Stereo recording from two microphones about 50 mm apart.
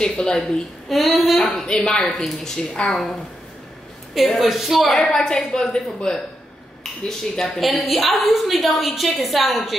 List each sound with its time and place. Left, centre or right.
0.0 s a woman's voice: centre
0.8 s a woman's voice: centre
4.1 s a woman's voice: centre
5.1 s a woman's voice: centre